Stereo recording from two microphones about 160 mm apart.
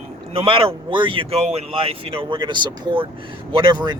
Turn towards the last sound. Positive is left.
turn(degrees=-30)  # may be behind; listen again after turning